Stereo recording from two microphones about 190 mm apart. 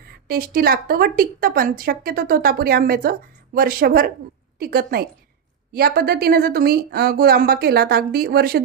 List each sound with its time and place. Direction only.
0.3 s speech: 50° right (ahead or behind)